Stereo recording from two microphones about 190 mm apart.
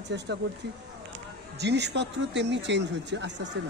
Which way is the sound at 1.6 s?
65° right (ahead or behind).